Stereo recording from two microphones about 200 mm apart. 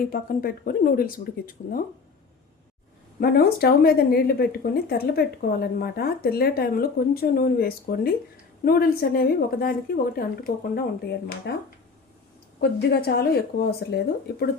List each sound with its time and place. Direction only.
0.0 s a woman's voice: 45° left (ahead or behind)
3.2 s a woman's voice: 50° left (ahead or behind)
11.5 s a woman's voice: 55° left (ahead or behind)